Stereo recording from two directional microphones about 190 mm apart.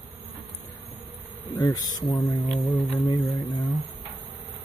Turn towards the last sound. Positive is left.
turn(degrees=20)  # may be behind; listen again after turning